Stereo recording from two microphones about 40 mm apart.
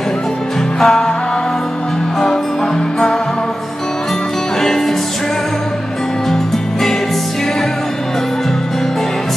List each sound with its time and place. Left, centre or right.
0.7 s music: centre
4.6 s music: centre